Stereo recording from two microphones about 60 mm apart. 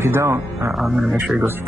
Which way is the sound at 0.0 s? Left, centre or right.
Right.